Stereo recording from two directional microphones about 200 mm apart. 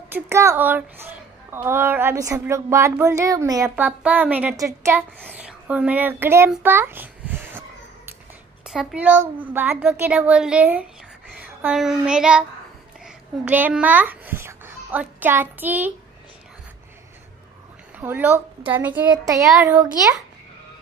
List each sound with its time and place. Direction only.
0.1 s a woman's voice: 15° right (ahead or behind)
5.4 s a sound: 5° right (ahead or behind)
8.6 s a woman's voice: 5° right (ahead or behind)
11.4 s a sound: 5° right (ahead or behind)
13.0 s a child's voice: 10° right (ahead or behind)
17.9 s a woman's voice: 10° right (ahead or behind)